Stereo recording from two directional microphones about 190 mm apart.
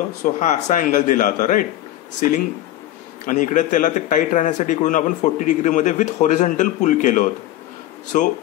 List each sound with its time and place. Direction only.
0.2 s a man's voice: 40° left (ahead or behind)
3.3 s a man's voice: 40° left (ahead or behind)